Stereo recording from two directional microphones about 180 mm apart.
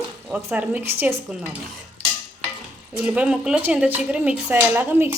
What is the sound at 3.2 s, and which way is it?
Speech, 5° right (ahead or behind).